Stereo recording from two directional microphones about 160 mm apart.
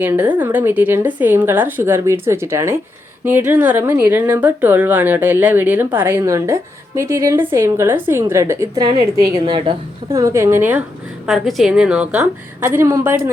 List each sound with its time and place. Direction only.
0.0 s a woman's voice: 10° right (ahead or behind)
11.3 s a woman's voice: centre (ahead or behind)